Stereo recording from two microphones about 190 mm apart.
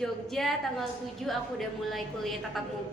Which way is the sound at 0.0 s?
Centre (ahead or behind).